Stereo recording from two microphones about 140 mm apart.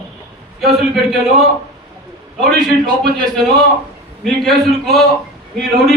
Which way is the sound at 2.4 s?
5° left (ahead or behind).